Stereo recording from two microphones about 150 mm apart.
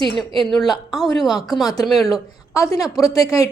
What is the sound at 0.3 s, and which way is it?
A woman's voice, centre (ahead or behind).